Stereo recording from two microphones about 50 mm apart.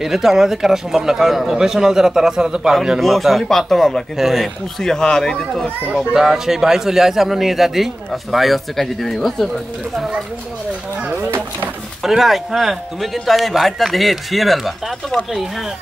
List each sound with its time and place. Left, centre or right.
0.0 s a man's voice: centre
3.0 s a man's voice: centre
4.2 s a man's voice: centre
4.7 s speech: centre
6.1 s a man's voice: centre
9.9 s a man's voice: centre
11.2 s a sound: right
12.0 s a man's voice: centre